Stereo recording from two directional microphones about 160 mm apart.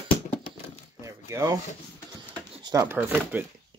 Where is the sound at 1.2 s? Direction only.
20° right (ahead or behind).